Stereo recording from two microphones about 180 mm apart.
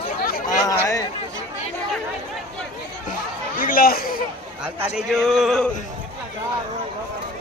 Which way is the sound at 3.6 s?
50° left (ahead or behind).